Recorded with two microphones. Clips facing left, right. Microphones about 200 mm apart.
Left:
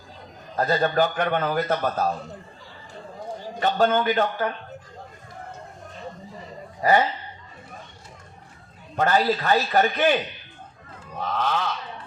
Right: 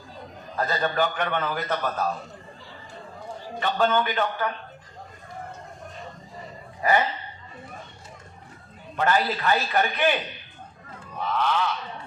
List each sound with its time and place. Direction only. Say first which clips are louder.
0.5 s a man's voice: left 4 dB; 40° left (ahead or behind)
3.6 s a man's voice: left 2 dB; 40° left (ahead or behind)
9.0 s a man's voice: left 3 dB; 40° left (ahead or behind)
11.2 s a sound: even; 45° left (ahead or behind)